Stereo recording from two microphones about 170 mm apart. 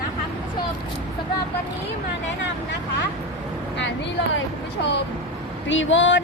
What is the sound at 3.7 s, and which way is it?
Speech, 90° left.